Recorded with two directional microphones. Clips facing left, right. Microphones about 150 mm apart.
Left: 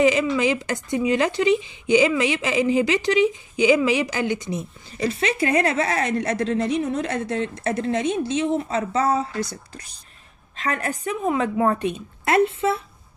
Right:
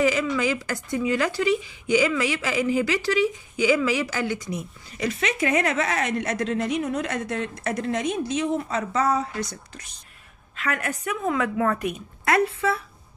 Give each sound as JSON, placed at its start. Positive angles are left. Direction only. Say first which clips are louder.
{"t": 0.0, "sound": "a woman's voice", "louder": "left 4 dB", "side_deg": 20}